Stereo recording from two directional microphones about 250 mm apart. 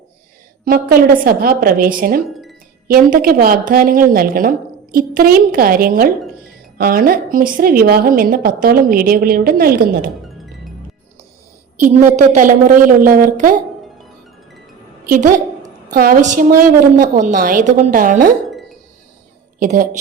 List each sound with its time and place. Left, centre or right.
0.6 s a woman's voice: right
12.1 s a woman's voice: right
15.0 s a woman's voice: right
19.5 s a woman's voice: right